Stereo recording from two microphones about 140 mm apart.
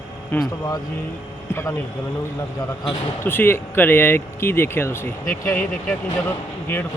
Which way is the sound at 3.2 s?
15° left (ahead or behind).